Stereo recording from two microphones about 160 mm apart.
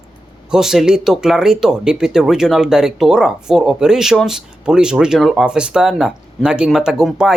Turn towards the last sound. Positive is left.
turn(degrees=-5)  # may be behind; listen again after turning